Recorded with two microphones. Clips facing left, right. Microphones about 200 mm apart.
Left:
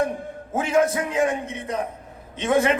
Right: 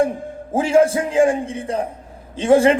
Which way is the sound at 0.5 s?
30° right (ahead or behind).